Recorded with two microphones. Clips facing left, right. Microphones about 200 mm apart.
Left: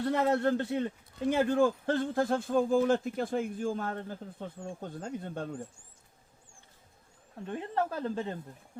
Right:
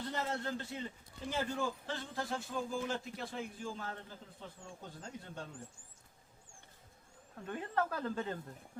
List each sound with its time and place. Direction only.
0.0 s a man's voice: 65° left (ahead or behind)
7.4 s speech: 25° left (ahead or behind)